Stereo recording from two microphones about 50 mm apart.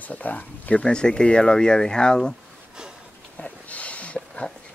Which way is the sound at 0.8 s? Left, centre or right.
Centre.